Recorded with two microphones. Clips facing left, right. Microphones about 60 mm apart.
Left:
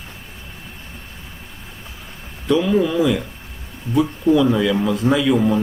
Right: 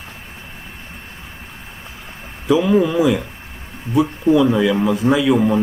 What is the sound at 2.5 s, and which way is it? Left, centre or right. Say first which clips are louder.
Speech: right 2 dB; centre.